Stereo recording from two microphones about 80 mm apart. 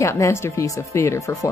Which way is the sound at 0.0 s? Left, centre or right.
Left.